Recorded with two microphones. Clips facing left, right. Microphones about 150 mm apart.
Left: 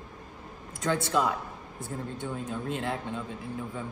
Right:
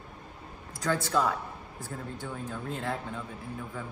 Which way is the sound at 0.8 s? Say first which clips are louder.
Left 1 dB; 20° left (ahead or behind).